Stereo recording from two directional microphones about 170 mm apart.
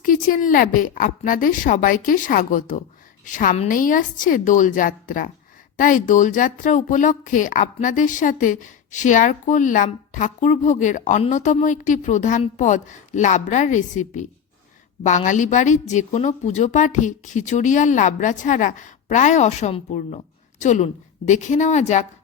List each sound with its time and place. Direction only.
0.0 s a woman's voice: 55° left (ahead or behind)